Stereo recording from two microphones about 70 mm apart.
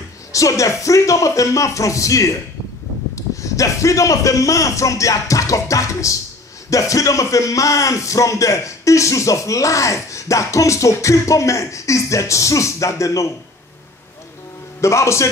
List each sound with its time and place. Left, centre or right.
0.3 s a man's voice: left
14.8 s a man's voice: left